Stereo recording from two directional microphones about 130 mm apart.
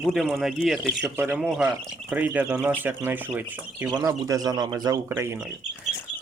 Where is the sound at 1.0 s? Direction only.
15° right (ahead or behind).